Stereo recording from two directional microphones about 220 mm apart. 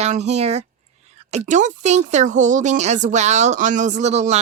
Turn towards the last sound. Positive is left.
turn(degrees=-30)  # may be behind; listen again after turning